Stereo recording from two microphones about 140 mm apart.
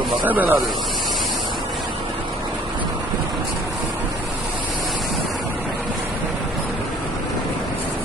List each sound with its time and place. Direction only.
0.2 s speech: 10° right (ahead or behind)